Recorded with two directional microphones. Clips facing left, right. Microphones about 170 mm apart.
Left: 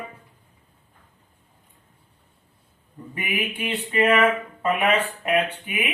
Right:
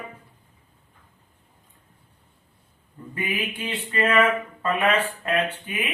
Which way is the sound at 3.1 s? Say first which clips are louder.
Even; 15° left (ahead or behind).